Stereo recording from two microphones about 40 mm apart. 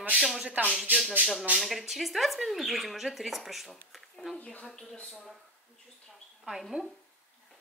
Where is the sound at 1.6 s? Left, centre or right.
Centre.